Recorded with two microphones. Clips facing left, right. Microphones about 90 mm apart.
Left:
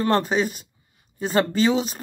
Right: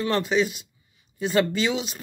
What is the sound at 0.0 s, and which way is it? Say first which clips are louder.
Speech: left 2 dB; 40° left (ahead or behind).